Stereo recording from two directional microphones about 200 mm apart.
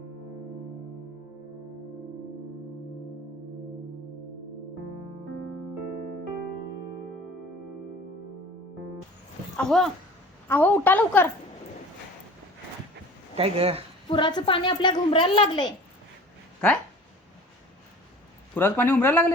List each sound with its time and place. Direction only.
9.6 s a woman's voice: centre (ahead or behind)
13.3 s speech: 30° right (ahead or behind)
14.1 s a woman's voice: 25° left (ahead or behind)
18.5 s a woman's voice: 10° left (ahead or behind)